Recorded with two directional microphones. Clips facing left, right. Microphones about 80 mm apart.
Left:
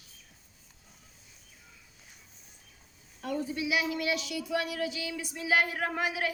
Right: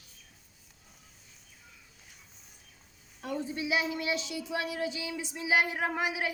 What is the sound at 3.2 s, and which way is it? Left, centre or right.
Speech, right.